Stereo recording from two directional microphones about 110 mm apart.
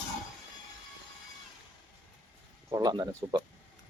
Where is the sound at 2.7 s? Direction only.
40° right (ahead or behind).